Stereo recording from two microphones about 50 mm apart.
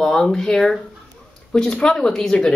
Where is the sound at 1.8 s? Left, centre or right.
Centre.